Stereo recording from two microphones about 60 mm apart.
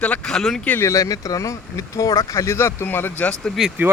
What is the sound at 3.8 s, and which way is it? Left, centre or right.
Speech, right.